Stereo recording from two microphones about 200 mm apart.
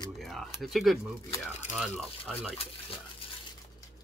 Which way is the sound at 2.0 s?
Centre (ahead or behind).